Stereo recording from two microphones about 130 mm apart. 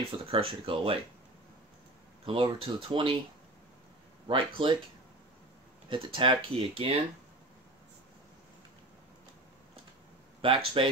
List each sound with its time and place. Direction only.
0.2 s speech: 45° right (ahead or behind)
2.2 s speech: 45° right (ahead or behind)
4.3 s speech: 40° right (ahead or behind)
5.9 s speech: 40° right (ahead or behind)
10.4 s speech: 45° right (ahead or behind)